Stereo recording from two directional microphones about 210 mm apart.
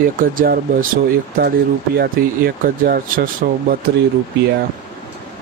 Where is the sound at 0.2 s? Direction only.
45° right (ahead or behind).